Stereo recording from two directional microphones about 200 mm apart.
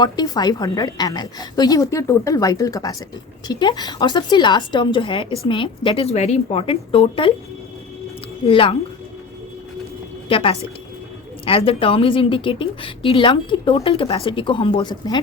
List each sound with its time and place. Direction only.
0.0 s a woman's voice: 20° left (ahead or behind)
8.4 s a woman's voice: 25° left (ahead or behind)
10.2 s a woman's voice: 25° left (ahead or behind)